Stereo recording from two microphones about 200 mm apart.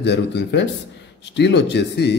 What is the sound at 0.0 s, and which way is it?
A man's voice, 55° left (ahead or behind).